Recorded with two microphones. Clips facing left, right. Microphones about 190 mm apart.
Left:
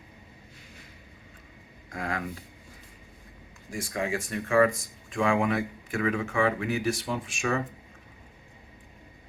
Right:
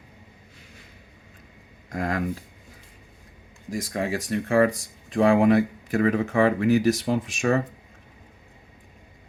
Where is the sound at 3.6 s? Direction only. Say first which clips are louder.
Right 4 dB; 40° right (ahead or behind).